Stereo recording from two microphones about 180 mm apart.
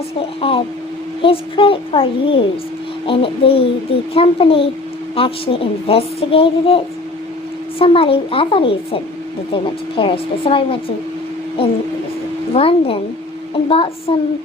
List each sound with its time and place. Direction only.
0.2 s speech: 30° left (ahead or behind)